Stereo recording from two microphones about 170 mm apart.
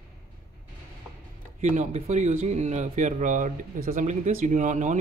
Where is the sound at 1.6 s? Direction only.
45° right (ahead or behind).